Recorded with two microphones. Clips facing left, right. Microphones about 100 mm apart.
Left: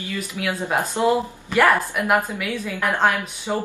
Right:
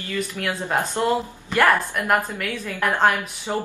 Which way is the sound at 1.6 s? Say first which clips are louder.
Left 1 dB; 5° left (ahead or behind).